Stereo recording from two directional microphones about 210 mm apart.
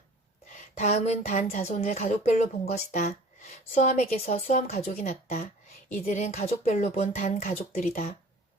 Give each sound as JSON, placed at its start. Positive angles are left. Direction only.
{"t": 0.8, "sound": "speech", "side_deg": 30}